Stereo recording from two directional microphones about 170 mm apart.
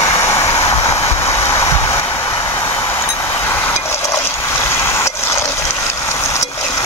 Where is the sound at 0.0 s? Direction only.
15° left (ahead or behind).